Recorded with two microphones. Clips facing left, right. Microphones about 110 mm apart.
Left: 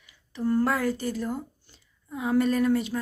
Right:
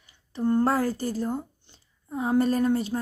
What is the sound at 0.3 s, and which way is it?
Speech, 30° right (ahead or behind).